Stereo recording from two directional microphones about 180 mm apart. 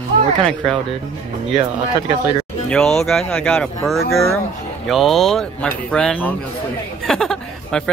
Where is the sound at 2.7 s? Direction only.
5° left (ahead or behind).